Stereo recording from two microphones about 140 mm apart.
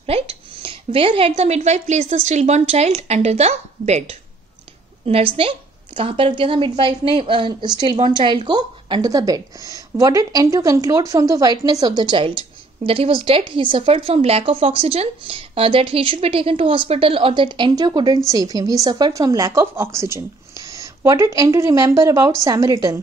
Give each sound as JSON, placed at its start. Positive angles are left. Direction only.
{"t": 0.0, "sound": "a woman's voice", "side_deg": -45}